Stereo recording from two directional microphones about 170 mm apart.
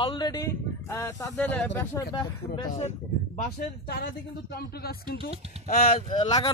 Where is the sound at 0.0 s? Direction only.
25° left (ahead or behind).